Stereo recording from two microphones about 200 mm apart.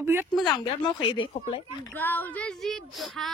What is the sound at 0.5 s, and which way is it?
Speech, 25° left (ahead or behind).